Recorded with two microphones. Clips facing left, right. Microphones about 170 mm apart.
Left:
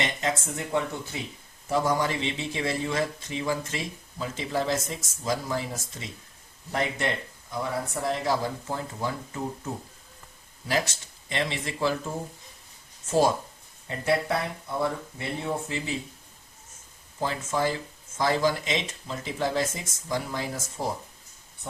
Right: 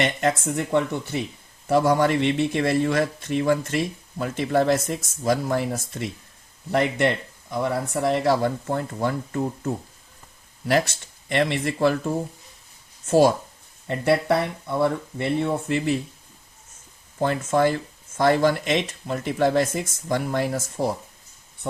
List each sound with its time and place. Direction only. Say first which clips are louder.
0.0 s speech: right 6 dB; 60° right (ahead or behind)
10.7 s speech: right 6 dB; 60° right (ahead or behind)
13.1 s speech: right 6 dB; 65° right (ahead or behind)
17.2 s speech: right 7 dB; 60° right (ahead or behind)